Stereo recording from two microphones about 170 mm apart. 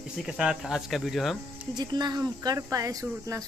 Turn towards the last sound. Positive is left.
turn(degrees=-20)  # may be behind; listen again after turning